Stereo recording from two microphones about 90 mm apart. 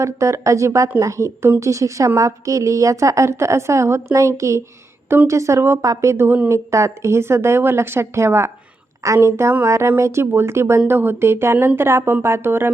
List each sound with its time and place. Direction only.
0.0 s a woman's voice: 35° right (ahead or behind)
5.0 s a woman's voice: 20° right (ahead or behind)
5.3 s a woman's voice: 35° right (ahead or behind)
6.2 s a woman's voice: 20° right (ahead or behind)
6.5 s a woman's voice: 35° right (ahead or behind)